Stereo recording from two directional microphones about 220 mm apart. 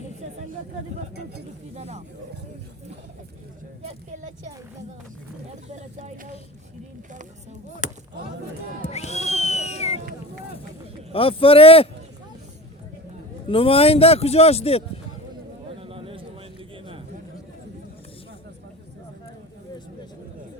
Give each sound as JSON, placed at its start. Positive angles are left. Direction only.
{"t": 1.7, "sound": "speech", "side_deg": -30}
{"t": 3.8, "sound": "speech", "side_deg": -35}
{"t": 5.7, "sound": "speech", "side_deg": -30}
{"t": 8.9, "sound": "a sound", "side_deg": 30}
{"t": 11.1, "sound": "speech", "side_deg": 25}
{"t": 13.5, "sound": "speech", "side_deg": 25}
{"t": 15.8, "sound": "a sound", "side_deg": -25}